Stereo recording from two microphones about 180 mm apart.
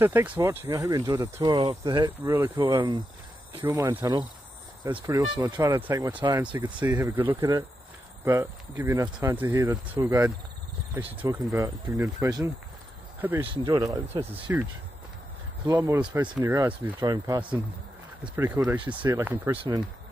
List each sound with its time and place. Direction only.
0.0 s speech: 10° right (ahead or behind)
1.6 s speech: 30° right (ahead or behind)
2.0 s speech: 20° right (ahead or behind)
3.6 s speech: 15° right (ahead or behind)
14.3 s speech: 10° right (ahead or behind)
17.0 s speech: 20° right (ahead or behind)
18.2 s speech: 10° right (ahead or behind)